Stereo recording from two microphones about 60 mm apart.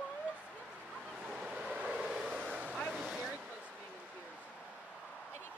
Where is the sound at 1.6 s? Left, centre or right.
Centre.